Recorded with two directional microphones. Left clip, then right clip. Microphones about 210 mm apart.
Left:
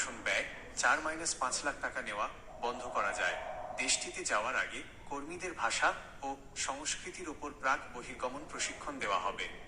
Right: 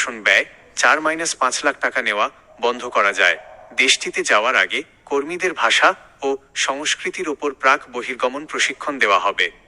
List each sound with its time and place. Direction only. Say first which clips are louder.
0.0 s speech: right 18 dB; 45° right (ahead or behind)